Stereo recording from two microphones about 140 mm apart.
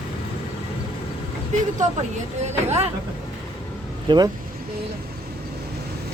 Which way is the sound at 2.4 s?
50° right (ahead or behind).